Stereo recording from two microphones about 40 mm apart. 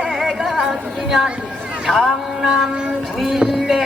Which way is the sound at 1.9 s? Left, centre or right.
Centre.